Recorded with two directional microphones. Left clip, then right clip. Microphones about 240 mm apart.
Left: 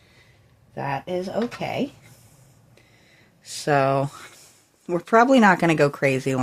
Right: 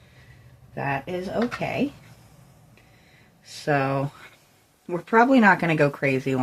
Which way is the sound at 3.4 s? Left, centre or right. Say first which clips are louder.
Left 4 dB; left.